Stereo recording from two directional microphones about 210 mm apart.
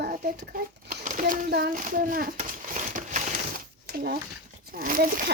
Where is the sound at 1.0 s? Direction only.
40° right (ahead or behind).